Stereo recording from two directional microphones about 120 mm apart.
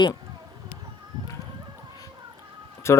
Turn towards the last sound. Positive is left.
turn(degrees=20)  # may be behind; listen again after turning